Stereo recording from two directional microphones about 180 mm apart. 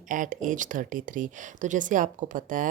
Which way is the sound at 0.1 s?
45° right (ahead or behind).